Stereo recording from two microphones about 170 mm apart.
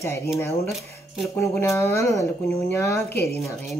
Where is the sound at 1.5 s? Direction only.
15° left (ahead or behind).